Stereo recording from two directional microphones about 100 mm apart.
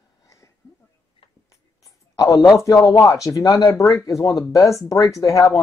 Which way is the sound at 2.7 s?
35° left (ahead or behind).